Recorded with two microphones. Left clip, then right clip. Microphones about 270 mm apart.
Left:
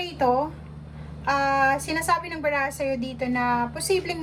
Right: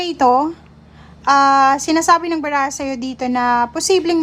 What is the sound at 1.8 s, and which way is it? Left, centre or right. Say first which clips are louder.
A woman's voice: right 11 dB; centre.